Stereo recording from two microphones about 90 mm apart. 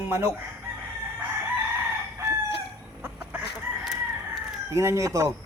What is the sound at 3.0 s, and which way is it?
Chicken, 20° right (ahead or behind).